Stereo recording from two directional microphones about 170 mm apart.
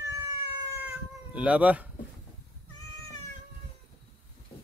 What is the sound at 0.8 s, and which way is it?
Cat, 5° right (ahead or behind).